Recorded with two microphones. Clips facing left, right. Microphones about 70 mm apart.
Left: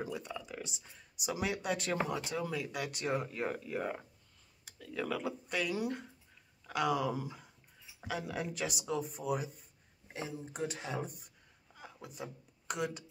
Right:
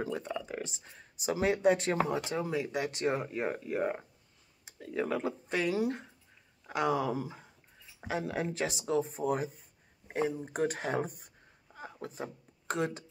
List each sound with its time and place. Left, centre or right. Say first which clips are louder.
0.0 s speech: right 5 dB; right
10.0 s speech: right 10 dB; right